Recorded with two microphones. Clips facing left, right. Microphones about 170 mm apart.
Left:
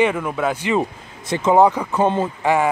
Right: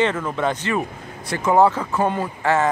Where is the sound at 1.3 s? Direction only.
20° left (ahead or behind).